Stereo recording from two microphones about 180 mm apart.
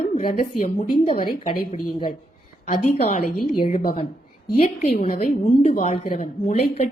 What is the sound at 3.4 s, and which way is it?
Speech, 50° left (ahead or behind).